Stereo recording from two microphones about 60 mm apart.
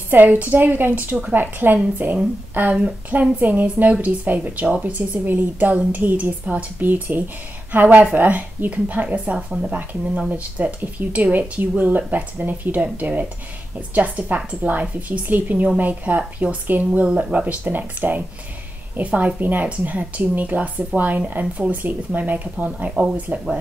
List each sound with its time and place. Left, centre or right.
0.1 s a woman's voice: right
17.0 s speech: centre